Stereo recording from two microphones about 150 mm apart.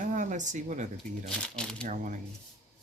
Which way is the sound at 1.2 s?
5° left (ahead or behind).